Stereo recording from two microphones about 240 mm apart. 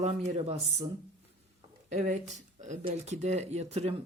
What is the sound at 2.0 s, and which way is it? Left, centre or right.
Speech, right.